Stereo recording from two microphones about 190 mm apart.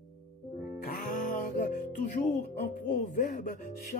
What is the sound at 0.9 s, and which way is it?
Music, 45° left (ahead or behind).